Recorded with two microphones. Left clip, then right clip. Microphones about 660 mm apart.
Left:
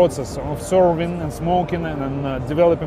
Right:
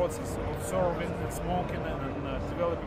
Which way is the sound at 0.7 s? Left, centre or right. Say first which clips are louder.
Left 14 dB; left.